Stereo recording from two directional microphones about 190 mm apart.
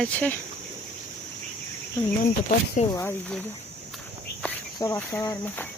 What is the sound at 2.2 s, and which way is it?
Speech, 40° left (ahead or behind).